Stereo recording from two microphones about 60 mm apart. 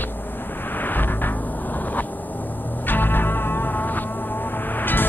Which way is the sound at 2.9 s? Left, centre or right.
Left.